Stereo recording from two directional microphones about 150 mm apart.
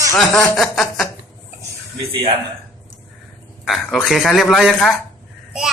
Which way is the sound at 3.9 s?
Centre (ahead or behind).